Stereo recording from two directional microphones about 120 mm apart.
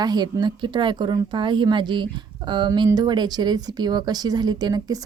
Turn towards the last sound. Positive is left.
turn(degrees=-30)  # may be behind; listen again after turning